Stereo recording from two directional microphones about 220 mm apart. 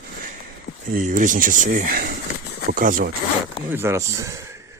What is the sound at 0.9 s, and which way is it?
Speech, 35° right (ahead or behind).